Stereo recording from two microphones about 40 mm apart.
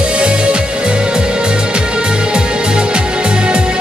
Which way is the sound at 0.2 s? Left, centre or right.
Right.